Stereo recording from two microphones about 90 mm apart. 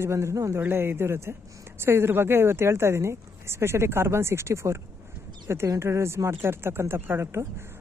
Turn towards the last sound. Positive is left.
turn(degrees=-25)  # may be behind; listen again after turning